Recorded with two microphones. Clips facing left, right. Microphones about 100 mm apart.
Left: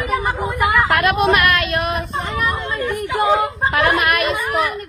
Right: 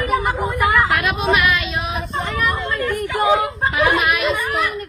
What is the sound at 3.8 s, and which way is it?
Speech, 60° left (ahead or behind).